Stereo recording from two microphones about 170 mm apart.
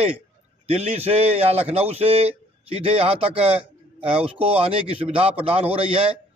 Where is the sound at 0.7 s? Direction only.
35° right (ahead or behind).